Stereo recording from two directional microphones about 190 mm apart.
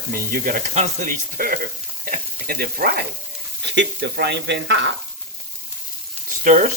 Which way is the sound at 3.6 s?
65° right (ahead or behind).